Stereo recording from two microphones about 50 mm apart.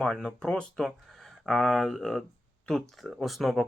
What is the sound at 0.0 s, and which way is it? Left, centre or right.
Speech, centre.